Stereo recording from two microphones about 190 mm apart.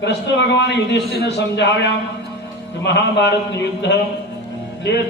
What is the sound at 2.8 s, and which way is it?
A man's voice, 65° left (ahead or behind).